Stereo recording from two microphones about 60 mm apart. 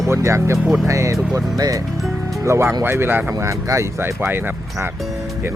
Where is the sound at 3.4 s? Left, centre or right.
Right.